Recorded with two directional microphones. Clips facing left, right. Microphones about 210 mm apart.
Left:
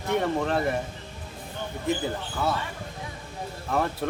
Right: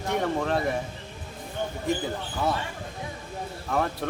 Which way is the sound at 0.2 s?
Centre (ahead or behind).